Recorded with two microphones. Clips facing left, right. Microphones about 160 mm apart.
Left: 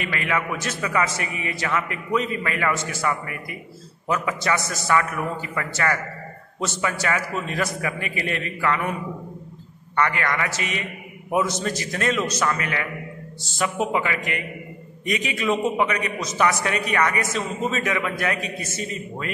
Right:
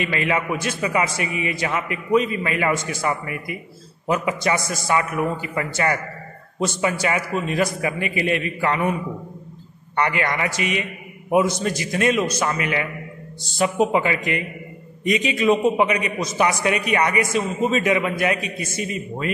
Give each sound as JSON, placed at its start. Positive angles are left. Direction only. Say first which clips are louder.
{"t": 0.0, "sound": "a man's voice", "louder": "right 3 dB", "side_deg": -20}
{"t": 9.9, "sound": "a man's voice", "louder": "right 1 dB", "side_deg": -20}